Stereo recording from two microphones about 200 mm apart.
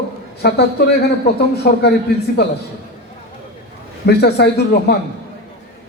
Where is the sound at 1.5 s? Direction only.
55° left (ahead or behind).